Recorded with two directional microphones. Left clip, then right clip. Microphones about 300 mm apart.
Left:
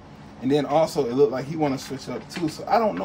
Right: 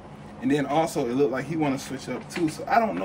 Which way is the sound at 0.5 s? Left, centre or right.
Left.